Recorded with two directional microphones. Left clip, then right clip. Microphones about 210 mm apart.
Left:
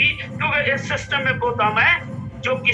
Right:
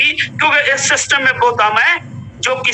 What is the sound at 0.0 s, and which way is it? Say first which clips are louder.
A man's voice: right 7 dB; 45° right (ahead or behind).